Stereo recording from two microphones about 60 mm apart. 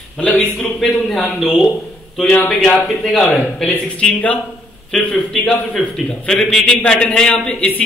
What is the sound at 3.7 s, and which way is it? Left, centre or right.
A man's voice, left.